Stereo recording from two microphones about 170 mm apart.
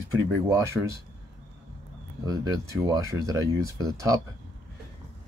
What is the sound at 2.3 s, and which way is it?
Speech, 20° right (ahead or behind).